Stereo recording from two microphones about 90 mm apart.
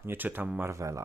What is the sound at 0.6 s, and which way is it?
Speech, 35° right (ahead or behind).